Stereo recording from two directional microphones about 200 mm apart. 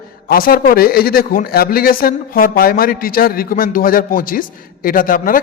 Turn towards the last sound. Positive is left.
turn(degrees=45)  # may be behind; listen again after turning